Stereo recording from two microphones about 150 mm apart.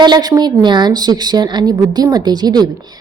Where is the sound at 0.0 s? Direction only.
30° right (ahead or behind).